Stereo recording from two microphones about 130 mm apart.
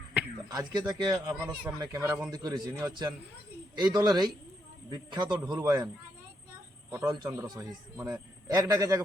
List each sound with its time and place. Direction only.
0.4 s a man's voice: 30° right (ahead or behind)
6.9 s a man's voice: 30° right (ahead or behind)